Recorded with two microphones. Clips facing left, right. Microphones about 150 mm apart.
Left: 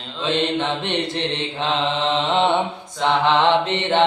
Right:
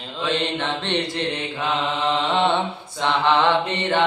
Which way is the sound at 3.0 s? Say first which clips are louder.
Left 2 dB; 20° left (ahead or behind).